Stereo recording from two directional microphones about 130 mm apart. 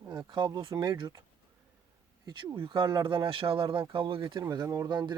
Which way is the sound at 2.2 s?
40° right (ahead or behind).